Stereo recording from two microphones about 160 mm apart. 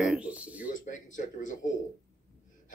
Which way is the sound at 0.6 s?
55° left (ahead or behind).